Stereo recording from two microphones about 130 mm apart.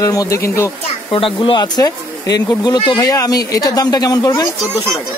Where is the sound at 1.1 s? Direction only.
40° left (ahead or behind).